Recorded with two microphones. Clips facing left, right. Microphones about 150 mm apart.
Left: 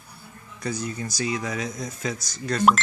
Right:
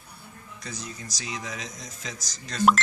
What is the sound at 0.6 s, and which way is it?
Speech, 60° left (ahead or behind).